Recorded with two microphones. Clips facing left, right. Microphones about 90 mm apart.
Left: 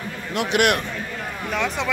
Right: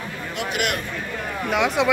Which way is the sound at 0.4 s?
60° left (ahead or behind).